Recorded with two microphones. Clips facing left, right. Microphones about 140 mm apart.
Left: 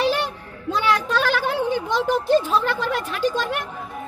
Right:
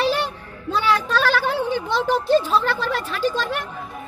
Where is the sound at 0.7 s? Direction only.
15° left (ahead or behind).